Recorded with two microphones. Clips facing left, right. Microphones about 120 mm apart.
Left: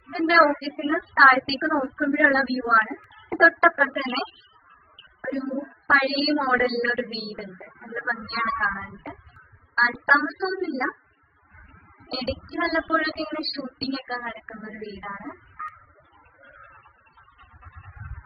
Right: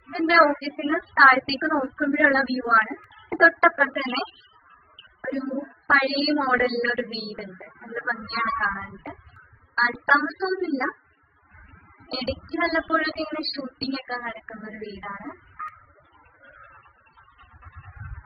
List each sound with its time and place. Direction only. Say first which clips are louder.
0.1 s speech: even; centre (ahead or behind)
8.7 s speech: even; 25° right (ahead or behind)
10.0 s speech: right 2 dB; centre (ahead or behind)
12.1 s speech: right 1 dB; centre (ahead or behind)